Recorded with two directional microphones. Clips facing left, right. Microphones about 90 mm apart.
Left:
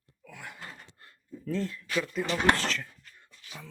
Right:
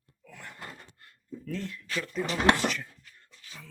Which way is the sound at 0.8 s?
30° left (ahead or behind).